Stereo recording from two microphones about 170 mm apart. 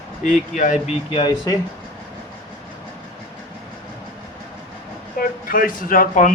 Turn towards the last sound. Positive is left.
turn(degrees=50)  # may be behind; listen again after turning